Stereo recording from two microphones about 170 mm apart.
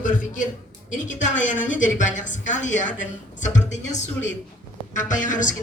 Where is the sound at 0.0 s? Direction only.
50° left (ahead or behind).